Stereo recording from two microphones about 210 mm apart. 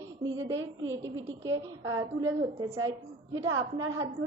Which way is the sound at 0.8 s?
65° right (ahead or behind).